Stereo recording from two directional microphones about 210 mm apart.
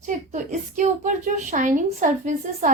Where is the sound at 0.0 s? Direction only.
35° right (ahead or behind).